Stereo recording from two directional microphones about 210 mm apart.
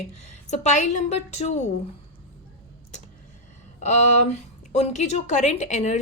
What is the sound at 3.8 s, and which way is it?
Speech, 35° left (ahead or behind).